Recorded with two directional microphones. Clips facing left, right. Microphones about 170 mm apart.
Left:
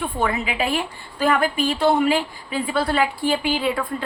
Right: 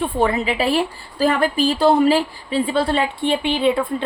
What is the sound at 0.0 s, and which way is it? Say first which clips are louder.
A woman's voice: right 5 dB; 30° right (ahead or behind).